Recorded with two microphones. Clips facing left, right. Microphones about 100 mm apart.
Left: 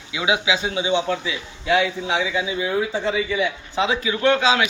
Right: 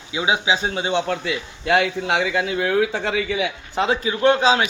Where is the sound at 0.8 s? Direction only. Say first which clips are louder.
Even; 60° right (ahead or behind).